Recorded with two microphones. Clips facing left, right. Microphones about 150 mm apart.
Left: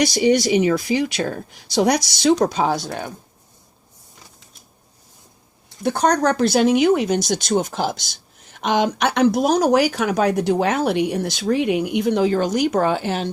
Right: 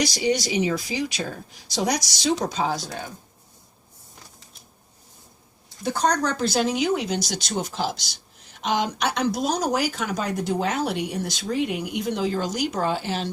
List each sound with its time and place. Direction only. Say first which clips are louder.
0.0 s speech: left 7 dB; 60° left (ahead or behind)
5.8 s speech: left 5 dB; 60° left (ahead or behind)